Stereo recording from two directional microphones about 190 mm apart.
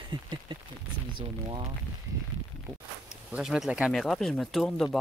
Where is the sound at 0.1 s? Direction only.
25° right (ahead or behind).